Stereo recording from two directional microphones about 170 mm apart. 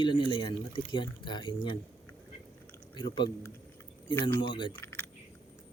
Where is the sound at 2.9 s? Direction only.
30° left (ahead or behind).